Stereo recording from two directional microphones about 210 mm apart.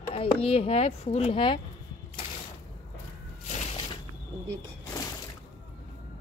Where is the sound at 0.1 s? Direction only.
25° left (ahead or behind).